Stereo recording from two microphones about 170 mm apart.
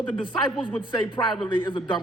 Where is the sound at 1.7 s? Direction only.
30° left (ahead or behind).